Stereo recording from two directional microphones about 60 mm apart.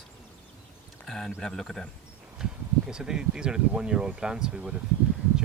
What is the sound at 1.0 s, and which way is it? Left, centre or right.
Speech, centre.